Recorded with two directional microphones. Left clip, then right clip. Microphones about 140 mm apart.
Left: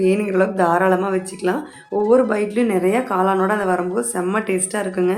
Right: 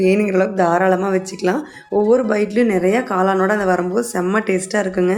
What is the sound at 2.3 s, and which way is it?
Speech, 20° right (ahead or behind).